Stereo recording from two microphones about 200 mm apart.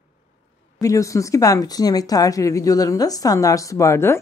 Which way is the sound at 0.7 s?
15° left (ahead or behind).